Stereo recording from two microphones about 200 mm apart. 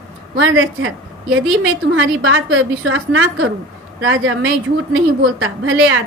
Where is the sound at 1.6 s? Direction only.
85° right.